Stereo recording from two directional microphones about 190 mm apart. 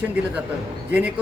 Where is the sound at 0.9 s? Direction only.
10° right (ahead or behind).